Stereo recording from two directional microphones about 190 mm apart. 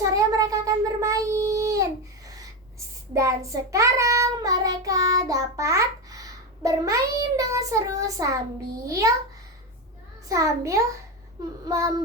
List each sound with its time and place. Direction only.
0.1 s a sound: 15° right (ahead or behind)
2.7 s child singing: 15° right (ahead or behind)
10.2 s child singing: 15° right (ahead or behind)